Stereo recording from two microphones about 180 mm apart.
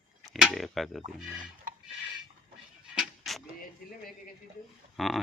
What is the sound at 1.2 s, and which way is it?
Speech, 5° right (ahead or behind).